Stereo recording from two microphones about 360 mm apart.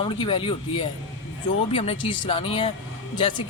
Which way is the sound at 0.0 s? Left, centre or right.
Centre.